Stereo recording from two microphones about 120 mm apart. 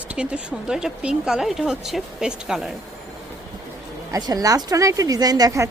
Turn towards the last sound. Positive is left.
turn(degrees=-30)  # may be behind; listen again after turning